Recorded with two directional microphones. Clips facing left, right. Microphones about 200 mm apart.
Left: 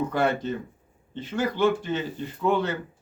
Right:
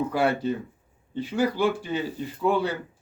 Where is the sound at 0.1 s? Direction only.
10° right (ahead or behind).